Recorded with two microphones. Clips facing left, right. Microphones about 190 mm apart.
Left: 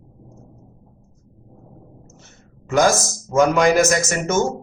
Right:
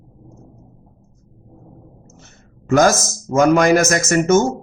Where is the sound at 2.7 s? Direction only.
45° right (ahead or behind).